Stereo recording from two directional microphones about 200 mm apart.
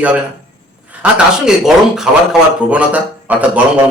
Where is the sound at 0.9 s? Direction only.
5° right (ahead or behind).